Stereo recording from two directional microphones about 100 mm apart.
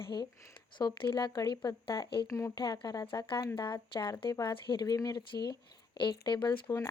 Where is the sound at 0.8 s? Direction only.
50° left (ahead or behind).